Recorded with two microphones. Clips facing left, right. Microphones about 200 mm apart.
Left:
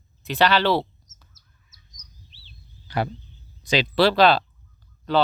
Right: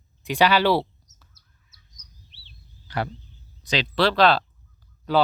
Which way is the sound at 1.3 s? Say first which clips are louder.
Left 2 dB; 60° right (ahead or behind).